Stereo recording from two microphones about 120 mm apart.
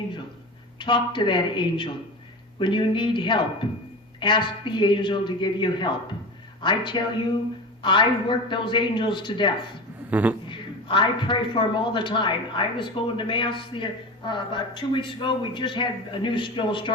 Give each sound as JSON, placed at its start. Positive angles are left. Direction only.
{"t": 0.8, "sound": "a man's voice", "side_deg": 40}
{"t": 10.1, "sound": "a man's voice", "side_deg": -15}
{"t": 10.5, "sound": "a man's voice", "side_deg": 45}